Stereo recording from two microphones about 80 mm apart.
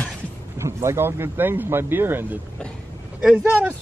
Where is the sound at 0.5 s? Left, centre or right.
Right.